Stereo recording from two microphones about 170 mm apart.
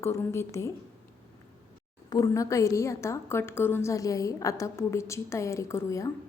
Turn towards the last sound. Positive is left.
turn(degrees=15)  # may be behind; listen again after turning